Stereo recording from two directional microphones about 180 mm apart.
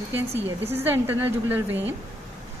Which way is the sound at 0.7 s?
10° right (ahead or behind).